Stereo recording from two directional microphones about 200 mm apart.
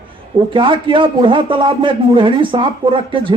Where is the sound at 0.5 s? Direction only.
25° right (ahead or behind).